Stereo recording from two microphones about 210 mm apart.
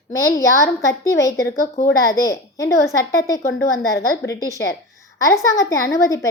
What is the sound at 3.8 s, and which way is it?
Speech, 50° left (ahead or behind).